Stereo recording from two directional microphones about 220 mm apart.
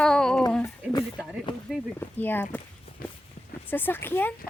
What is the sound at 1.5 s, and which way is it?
Speech, 20° left (ahead or behind).